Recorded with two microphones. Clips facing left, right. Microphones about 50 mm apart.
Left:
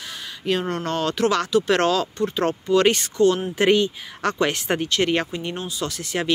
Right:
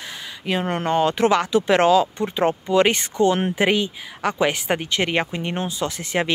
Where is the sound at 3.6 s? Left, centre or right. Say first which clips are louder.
Left 2 dB; centre.